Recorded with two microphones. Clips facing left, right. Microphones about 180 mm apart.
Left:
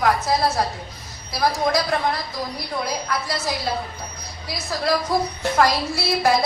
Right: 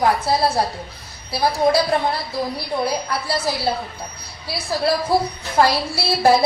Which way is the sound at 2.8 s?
30° right (ahead or behind).